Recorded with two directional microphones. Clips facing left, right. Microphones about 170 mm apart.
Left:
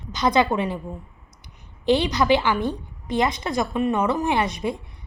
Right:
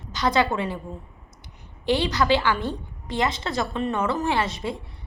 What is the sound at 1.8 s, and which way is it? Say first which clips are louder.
A woman's voice: left 3 dB; 20° left (ahead or behind).